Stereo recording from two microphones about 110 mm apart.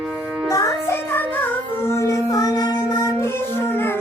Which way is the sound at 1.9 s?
30° left (ahead or behind).